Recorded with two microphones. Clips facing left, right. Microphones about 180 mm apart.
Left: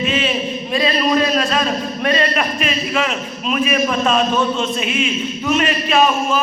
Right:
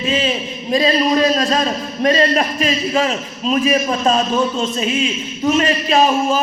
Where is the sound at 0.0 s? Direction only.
35° right (ahead or behind).